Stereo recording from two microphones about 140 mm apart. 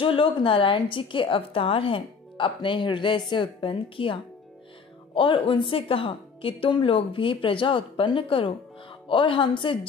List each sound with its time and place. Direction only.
0.0 s a woman's voice: 40° left (ahead or behind)